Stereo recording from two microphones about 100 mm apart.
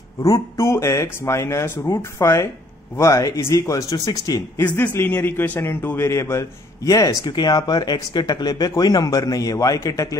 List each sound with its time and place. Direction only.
0.2 s a man's voice: 30° left (ahead or behind)
4.6 s a man's voice: 15° left (ahead or behind); by 10.1 s 35° left (ahead or behind)